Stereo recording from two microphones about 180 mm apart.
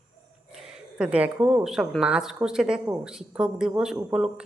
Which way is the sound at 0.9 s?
5° right (ahead or behind).